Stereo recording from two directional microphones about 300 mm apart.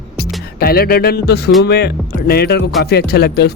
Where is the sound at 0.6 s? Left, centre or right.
Left.